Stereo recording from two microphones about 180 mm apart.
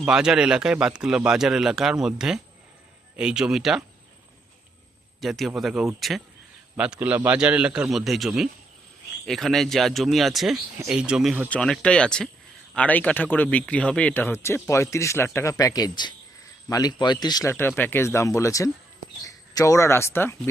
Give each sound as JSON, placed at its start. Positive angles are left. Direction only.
{"t": 0.0, "sound": "speech", "side_deg": -5}
{"t": 5.2, "sound": "a man's voice", "side_deg": 0}
{"t": 17.5, "sound": "speech", "side_deg": 10}